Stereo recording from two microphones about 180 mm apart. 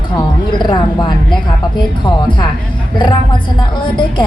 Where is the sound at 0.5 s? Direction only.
25° left (ahead or behind).